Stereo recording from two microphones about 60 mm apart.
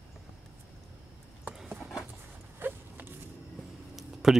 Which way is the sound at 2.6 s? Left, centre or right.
Right.